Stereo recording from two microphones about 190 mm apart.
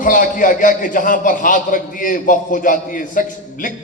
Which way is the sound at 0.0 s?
45° left (ahead or behind).